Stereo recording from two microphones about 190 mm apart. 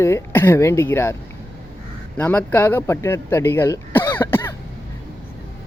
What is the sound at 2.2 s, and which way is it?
Speech, 10° left (ahead or behind).